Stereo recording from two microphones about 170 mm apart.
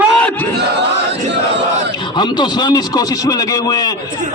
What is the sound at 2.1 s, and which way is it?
A man's voice, 25° left (ahead or behind).